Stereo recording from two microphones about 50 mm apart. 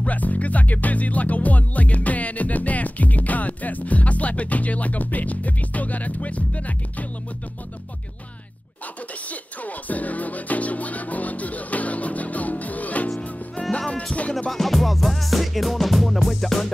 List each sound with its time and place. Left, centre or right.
0.0 s music: left
9.3 s music: left
14.5 s music: centre